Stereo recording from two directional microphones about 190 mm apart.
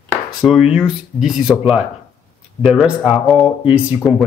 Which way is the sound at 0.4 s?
5° right (ahead or behind).